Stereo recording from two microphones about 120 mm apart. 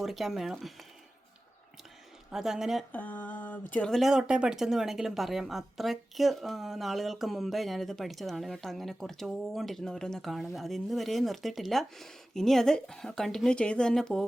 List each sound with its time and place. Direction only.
0.0 s speech: centre (ahead or behind)
2.3 s speech: 5° right (ahead or behind)
2.9 s a sound: 15° left (ahead or behind)
3.9 s speech: 5° right (ahead or behind)